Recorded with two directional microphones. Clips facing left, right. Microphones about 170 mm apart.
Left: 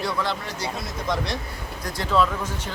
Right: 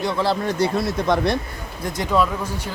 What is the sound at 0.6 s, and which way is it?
Speech, 60° right (ahead or behind).